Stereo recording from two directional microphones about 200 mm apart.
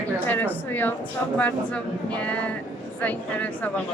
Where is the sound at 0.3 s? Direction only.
10° left (ahead or behind).